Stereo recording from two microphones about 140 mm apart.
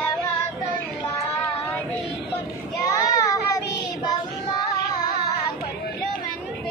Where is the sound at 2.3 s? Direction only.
25° left (ahead or behind).